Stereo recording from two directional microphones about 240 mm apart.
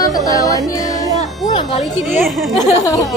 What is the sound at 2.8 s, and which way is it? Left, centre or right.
Speech, centre.